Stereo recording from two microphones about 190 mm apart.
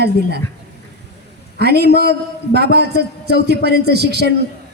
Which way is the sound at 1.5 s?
60° right (ahead or behind).